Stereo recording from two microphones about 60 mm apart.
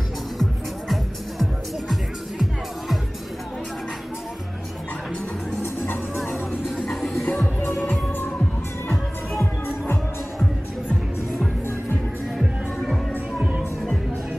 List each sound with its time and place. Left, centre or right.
1.4 s music: centre
6.1 s music: centre
12.4 s music: centre
13.4 s music: right